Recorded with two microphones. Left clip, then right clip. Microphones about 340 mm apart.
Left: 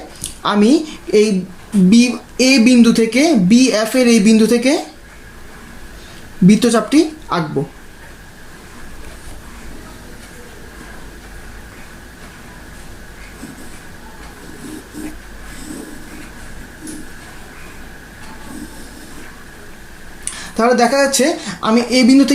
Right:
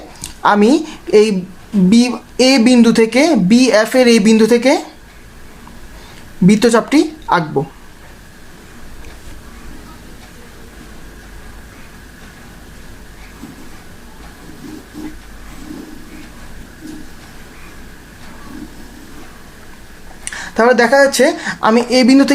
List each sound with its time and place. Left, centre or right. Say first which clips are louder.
0.2 s a woman's voice: right 4 dB; right
6.5 s speech: right 2 dB; right
20.2 s a sound: right 3 dB; right
21.1 s speech: right 3 dB; right